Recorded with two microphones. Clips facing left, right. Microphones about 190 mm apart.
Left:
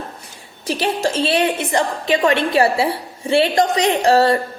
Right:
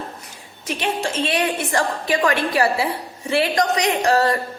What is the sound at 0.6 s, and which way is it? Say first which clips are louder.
Speech: left 4 dB; 35° left (ahead or behind).